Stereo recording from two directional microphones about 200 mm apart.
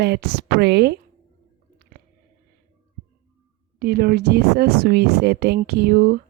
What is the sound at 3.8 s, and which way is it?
Speech, 55° right (ahead or behind).